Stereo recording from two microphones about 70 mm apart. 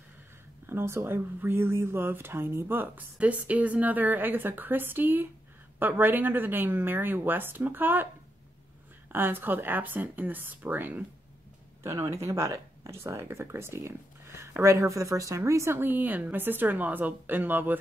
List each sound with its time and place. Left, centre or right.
0.7 s speech: right
9.1 s speech: right
11.8 s speech: right
13.0 s speech: right